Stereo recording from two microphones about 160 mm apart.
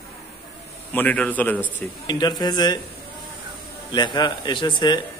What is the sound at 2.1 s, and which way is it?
Speech, 25° left (ahead or behind).